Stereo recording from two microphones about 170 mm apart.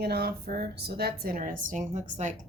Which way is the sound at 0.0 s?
70° right (ahead or behind).